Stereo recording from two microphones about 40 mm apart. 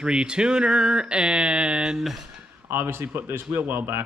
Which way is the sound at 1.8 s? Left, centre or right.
Centre.